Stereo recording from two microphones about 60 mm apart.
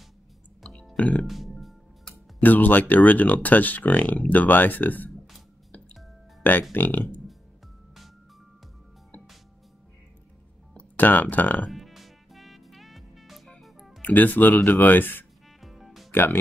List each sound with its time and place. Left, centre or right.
0.9 s music: left
1.2 s music: centre
2.4 s speech: left
6.7 s speech: left
11.0 s speech: left
11.6 s music: centre
14.0 s speech: left
15.6 s music: centre
16.1 s speech: left